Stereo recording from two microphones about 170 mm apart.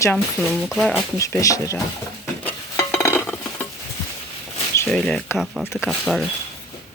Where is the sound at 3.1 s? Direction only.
10° left (ahead or behind).